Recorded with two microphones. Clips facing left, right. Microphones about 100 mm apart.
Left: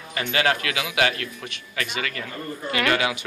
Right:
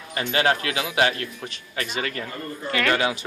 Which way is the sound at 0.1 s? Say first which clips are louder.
Right 1 dB; 30° right (ahead or behind).